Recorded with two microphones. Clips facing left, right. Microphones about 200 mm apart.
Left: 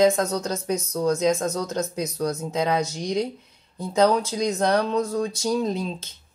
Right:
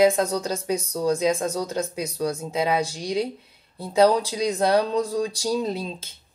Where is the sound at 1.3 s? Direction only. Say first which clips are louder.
Even; 10° right (ahead or behind).